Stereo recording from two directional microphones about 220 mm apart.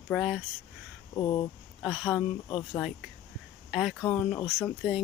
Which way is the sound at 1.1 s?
20° left (ahead or behind).